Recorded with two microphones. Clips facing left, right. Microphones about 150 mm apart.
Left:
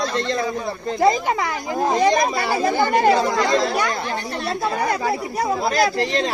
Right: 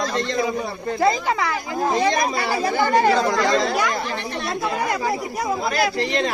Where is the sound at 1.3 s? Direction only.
20° left (ahead or behind).